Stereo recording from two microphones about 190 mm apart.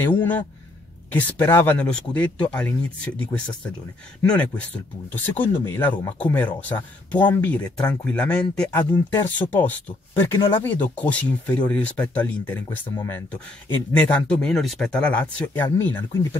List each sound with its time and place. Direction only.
1.1 s speech: 10° left (ahead or behind)